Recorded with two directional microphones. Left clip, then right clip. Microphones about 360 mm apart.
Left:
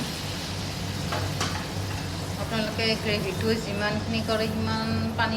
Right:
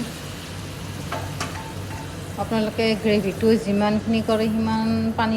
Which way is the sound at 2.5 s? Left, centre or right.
Centre.